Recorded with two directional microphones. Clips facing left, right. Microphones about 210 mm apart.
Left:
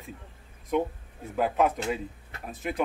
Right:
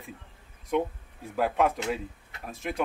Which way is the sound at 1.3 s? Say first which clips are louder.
Left 1 dB; centre (ahead or behind).